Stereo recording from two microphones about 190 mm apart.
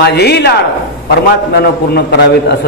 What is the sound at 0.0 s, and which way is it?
Speech, 60° left (ahead or behind).